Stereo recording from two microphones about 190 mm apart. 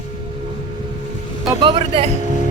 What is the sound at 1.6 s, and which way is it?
Music, 30° right (ahead or behind).